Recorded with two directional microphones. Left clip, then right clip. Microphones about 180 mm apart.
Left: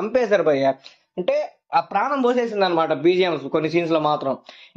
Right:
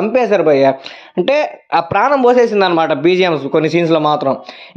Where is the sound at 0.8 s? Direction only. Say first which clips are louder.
Right 8 dB; 45° right (ahead or behind).